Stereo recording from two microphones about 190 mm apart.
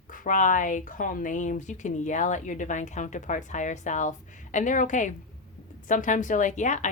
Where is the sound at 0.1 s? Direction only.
40° left (ahead or behind).